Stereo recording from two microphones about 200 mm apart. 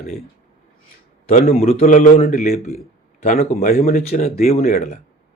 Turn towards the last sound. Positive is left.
turn(degrees=35)  # may be behind; listen again after turning